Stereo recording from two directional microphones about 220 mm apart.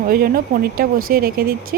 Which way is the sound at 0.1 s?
40° right (ahead or behind).